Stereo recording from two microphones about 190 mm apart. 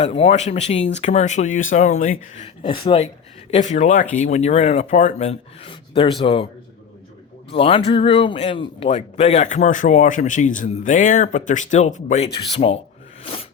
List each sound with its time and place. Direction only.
0.0 s a man's voice: 30° left (ahead or behind)
7.5 s speech: 30° left (ahead or behind)